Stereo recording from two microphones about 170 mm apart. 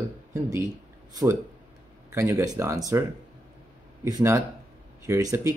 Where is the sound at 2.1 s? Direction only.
15° right (ahead or behind).